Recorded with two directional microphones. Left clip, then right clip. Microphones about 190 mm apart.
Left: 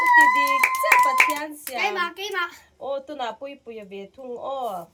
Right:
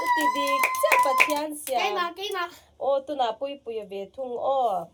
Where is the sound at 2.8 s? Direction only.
35° right (ahead or behind).